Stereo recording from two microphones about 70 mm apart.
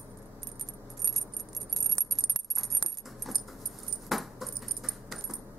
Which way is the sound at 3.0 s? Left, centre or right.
Centre.